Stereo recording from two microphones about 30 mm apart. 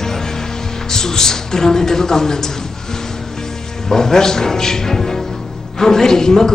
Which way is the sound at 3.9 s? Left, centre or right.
Centre.